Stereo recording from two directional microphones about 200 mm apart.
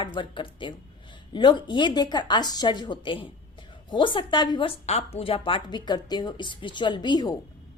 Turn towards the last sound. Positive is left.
turn(degrees=20)  # may be behind; listen again after turning